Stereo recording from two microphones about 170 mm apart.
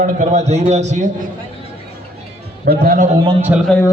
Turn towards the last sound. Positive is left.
turn(degrees=-10)  # may be behind; listen again after turning